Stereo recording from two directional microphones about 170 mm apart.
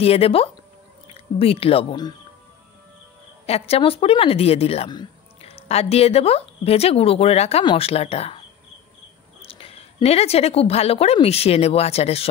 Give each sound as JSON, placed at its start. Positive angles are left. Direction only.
{"t": 0.0, "sound": "a woman's voice", "side_deg": 35}
{"t": 3.4, "sound": "a woman's voice", "side_deg": 35}
{"t": 9.5, "sound": "a woman's voice", "side_deg": 35}